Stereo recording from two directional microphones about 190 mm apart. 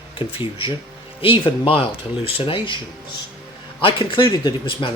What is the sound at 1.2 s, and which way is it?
A man's voice, 30° left (ahead or behind).